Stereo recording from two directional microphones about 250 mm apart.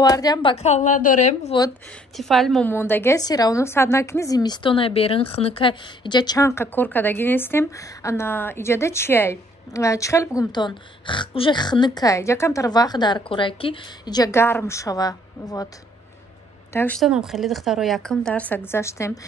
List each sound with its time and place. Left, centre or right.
0.0 s a woman's voice: centre
1.6 s a woman's voice: centre
16.7 s a woman's voice: centre